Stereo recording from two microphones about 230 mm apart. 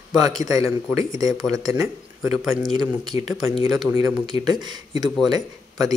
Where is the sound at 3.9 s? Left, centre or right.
Centre.